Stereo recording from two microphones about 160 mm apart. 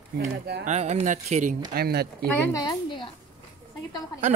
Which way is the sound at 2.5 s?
25° left (ahead or behind).